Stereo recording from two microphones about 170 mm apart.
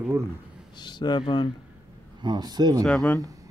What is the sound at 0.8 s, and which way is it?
Speech, 25° left (ahead or behind).